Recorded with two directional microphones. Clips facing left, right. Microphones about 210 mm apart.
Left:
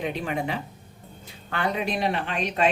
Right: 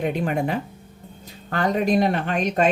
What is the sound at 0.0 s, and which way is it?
Speech, 50° right (ahead or behind).